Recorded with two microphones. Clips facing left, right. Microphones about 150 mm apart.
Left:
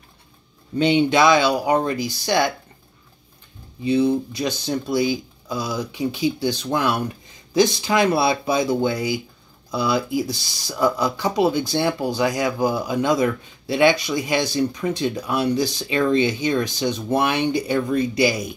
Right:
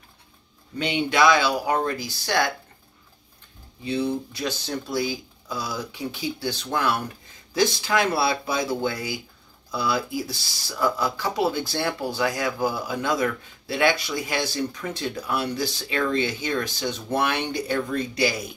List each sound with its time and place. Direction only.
0.7 s speech: 25° left (ahead or behind)
3.8 s speech: 15° left (ahead or behind)